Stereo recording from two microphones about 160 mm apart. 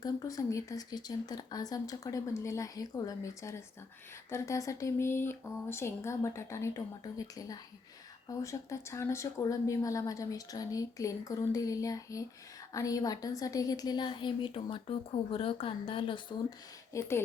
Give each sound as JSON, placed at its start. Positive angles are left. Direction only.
{"t": 0.0, "sound": "speech", "side_deg": 20}
{"t": 16.9, "sound": "speech", "side_deg": 15}